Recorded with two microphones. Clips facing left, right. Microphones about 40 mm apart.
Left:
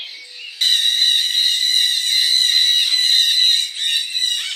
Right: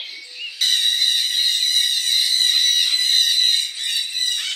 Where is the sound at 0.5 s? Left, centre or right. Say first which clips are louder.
Left 3 dB; left.